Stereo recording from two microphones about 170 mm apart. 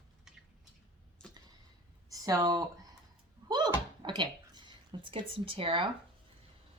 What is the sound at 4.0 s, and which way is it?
Speech, 25° right (ahead or behind).